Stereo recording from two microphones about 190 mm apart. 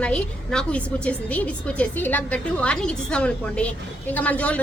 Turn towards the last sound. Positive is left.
turn(degrees=5)  # may be behind; listen again after turning